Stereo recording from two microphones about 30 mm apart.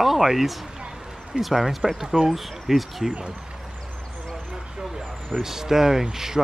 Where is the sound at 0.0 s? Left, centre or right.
Centre.